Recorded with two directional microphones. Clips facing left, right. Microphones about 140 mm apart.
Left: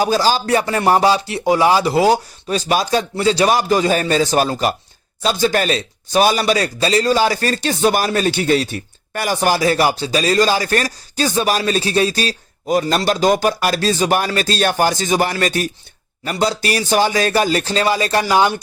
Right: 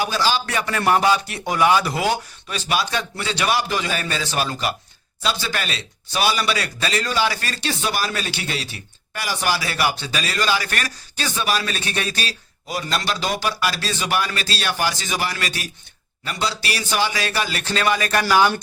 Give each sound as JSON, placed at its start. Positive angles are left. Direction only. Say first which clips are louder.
{"t": 0.0, "sound": "a man's voice", "louder": "left 6 dB", "side_deg": 40}